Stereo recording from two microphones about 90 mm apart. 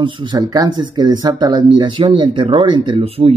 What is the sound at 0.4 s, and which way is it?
Speech, 45° right (ahead or behind).